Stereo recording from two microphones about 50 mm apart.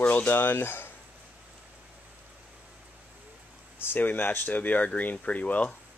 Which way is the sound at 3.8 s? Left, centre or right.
Left.